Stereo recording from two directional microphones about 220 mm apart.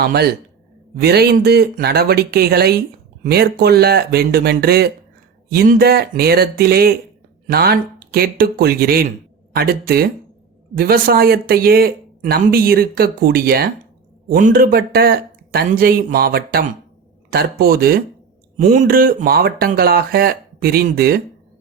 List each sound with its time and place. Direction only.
0.0 s speech: 45° right (ahead or behind)